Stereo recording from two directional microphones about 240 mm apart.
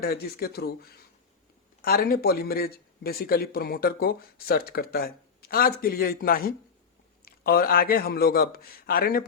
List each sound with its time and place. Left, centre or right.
0.0 s speech: left